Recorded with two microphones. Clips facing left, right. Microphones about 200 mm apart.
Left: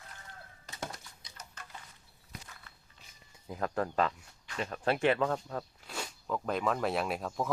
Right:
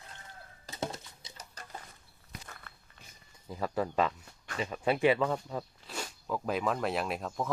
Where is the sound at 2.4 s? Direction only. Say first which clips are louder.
Right 4 dB; 55° right (ahead or behind).